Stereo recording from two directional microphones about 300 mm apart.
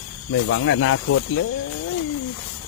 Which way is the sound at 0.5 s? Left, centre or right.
Left.